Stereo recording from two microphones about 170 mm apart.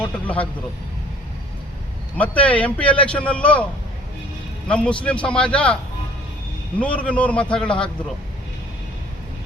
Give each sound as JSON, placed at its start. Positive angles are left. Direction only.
{"t": 0.0, "sound": "a man's voice", "side_deg": 10}
{"t": 2.1, "sound": "a man's voice", "side_deg": 10}
{"t": 4.7, "sound": "a man's voice", "side_deg": 5}
{"t": 6.7, "sound": "a man's voice", "side_deg": 10}